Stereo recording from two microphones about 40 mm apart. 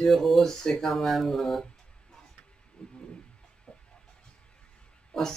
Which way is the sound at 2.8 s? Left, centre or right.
Left.